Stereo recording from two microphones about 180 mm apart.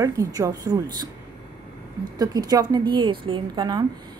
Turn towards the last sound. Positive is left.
turn(degrees=-25)  # may be behind; listen again after turning